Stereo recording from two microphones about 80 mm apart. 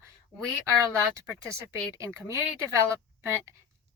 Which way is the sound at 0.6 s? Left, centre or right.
Right.